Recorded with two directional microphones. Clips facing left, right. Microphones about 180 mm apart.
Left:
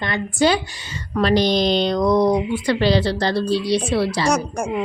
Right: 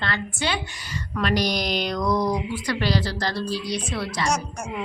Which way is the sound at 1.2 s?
30° left (ahead or behind).